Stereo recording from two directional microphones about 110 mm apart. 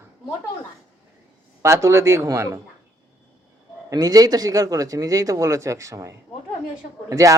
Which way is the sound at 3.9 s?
35° right (ahead or behind).